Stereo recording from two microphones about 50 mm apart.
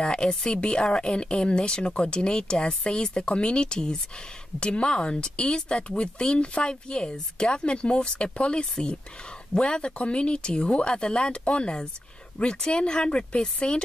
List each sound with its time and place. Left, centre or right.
0.0 s speech: centre